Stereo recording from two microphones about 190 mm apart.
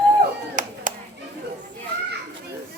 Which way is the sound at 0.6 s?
45° right (ahead or behind).